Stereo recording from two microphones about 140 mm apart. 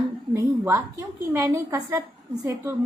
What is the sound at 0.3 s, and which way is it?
A woman's voice, 20° right (ahead or behind).